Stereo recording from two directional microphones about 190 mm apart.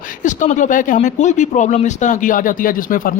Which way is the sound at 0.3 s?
40° left (ahead or behind).